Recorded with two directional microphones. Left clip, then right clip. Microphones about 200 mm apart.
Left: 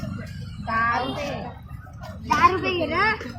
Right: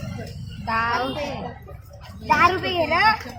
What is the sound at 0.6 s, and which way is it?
Speech, 55° right (ahead or behind).